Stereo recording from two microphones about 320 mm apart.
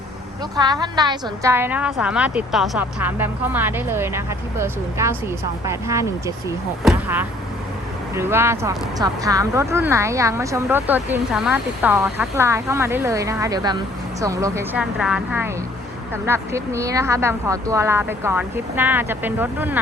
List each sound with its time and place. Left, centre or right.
0.5 s speech: centre